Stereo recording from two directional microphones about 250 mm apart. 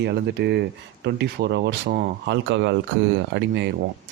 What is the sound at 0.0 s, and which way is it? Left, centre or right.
Speech, right.